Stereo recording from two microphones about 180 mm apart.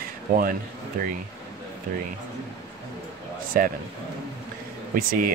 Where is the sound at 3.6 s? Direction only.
55° right (ahead or behind).